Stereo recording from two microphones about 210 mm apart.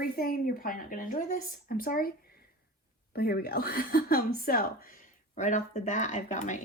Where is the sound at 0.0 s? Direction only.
45° left (ahead or behind).